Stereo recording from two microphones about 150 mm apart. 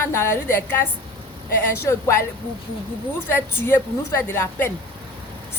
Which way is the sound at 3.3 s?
15° left (ahead or behind).